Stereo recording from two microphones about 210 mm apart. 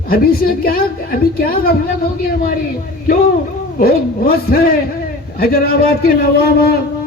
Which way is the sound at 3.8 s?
45° left (ahead or behind).